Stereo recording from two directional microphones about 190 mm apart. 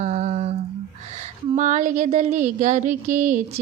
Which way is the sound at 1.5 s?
40° right (ahead or behind).